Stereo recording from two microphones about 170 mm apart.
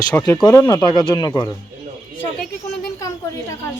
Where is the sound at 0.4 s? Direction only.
20° left (ahead or behind).